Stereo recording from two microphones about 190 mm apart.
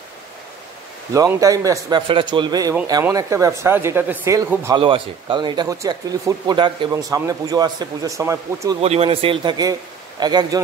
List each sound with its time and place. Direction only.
1.1 s speech: 15° right (ahead or behind)
4.7 s speech: 25° right (ahead or behind)
8.8 s speech: 30° right (ahead or behind)